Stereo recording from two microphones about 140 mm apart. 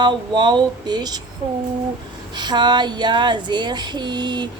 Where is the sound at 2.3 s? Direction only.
30° right (ahead or behind).